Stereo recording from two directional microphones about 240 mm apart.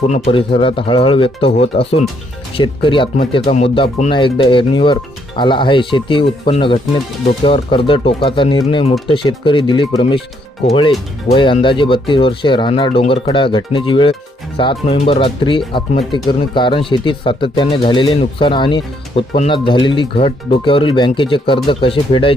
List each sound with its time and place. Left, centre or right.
0.1 s speech: left